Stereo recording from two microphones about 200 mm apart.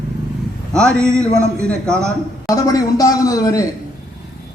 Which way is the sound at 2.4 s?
15° left (ahead or behind).